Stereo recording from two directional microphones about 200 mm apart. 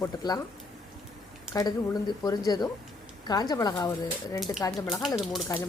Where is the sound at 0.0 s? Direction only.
20° left (ahead or behind).